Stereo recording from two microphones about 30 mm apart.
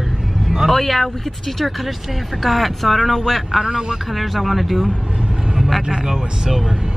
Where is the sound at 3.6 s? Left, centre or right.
Right.